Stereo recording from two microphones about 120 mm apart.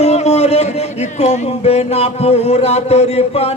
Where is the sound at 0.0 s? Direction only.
60° left (ahead or behind).